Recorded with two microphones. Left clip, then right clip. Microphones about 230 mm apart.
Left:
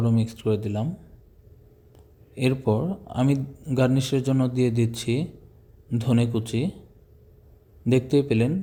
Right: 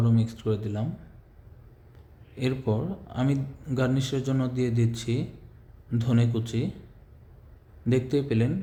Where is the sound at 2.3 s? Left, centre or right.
Left.